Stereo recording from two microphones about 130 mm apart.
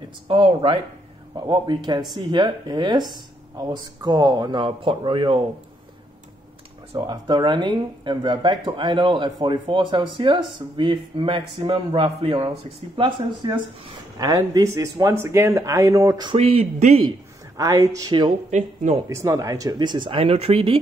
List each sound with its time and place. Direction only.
0.3 s speech: 40° right (ahead or behind)
7.0 s speech: 30° right (ahead or behind)
16.3 s speech: 50° right (ahead or behind)
17.6 s speech: 25° right (ahead or behind)
18.5 s speech: 65° right (ahead or behind)
19.0 s speech: 25° right (ahead or behind); by 20.8 s 50° right (ahead or behind)